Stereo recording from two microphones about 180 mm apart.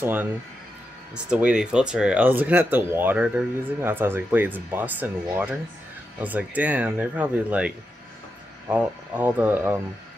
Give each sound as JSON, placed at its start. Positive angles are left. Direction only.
{"t": 0.0, "sound": "speech", "side_deg": -10}